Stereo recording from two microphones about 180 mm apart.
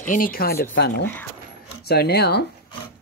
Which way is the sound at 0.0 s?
50° left (ahead or behind).